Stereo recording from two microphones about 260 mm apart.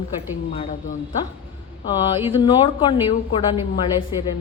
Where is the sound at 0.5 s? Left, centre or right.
Left.